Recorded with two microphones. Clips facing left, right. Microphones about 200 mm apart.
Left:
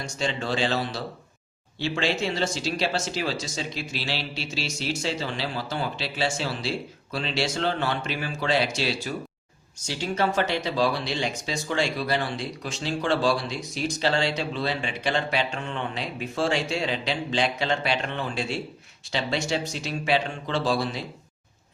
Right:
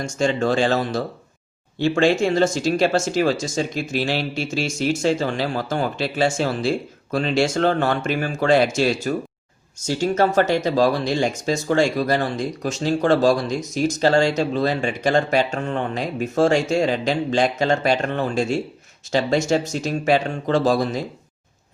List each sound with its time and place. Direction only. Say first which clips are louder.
0.0 s speech: right 9 dB; 45° right (ahead or behind)